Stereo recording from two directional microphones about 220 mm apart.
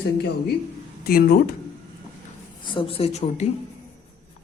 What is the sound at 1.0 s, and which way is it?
Speech, 45° left (ahead or behind).